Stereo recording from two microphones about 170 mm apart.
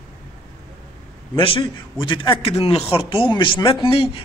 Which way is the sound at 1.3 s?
30° left (ahead or behind).